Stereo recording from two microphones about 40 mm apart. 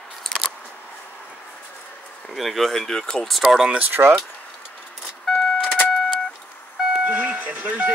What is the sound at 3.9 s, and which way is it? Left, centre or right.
Speech, right.